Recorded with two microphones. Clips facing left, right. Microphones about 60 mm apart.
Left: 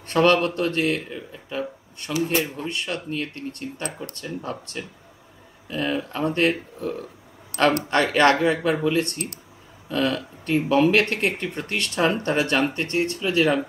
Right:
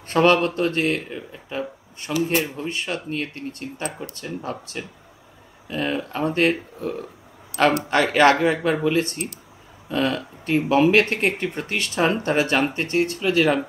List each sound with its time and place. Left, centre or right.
0.1 s speech: centre
2.2 s speech: right
2.5 s speech: centre
7.5 s speech: left
7.9 s speech: centre